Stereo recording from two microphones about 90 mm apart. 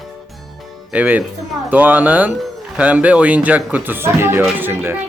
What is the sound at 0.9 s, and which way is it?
A man's voice, 15° right (ahead or behind).